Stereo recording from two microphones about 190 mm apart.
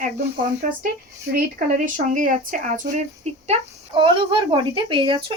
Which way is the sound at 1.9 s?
45° right (ahead or behind).